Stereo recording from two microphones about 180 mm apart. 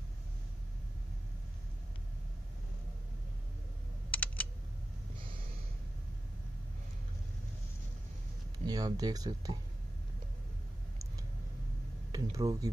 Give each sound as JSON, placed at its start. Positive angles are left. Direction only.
{"t": 4.1, "sound": "computer keyboard", "side_deg": 10}
{"t": 8.6, "sound": "speech", "side_deg": -20}
{"t": 12.1, "sound": "speech", "side_deg": -20}